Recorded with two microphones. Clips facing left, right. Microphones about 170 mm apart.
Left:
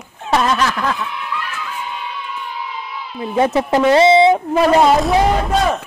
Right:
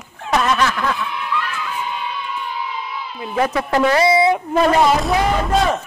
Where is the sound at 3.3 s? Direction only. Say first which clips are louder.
Left 3 dB; 25° left (ahead or behind).